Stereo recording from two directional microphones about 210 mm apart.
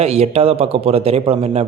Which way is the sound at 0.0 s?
30° right (ahead or behind).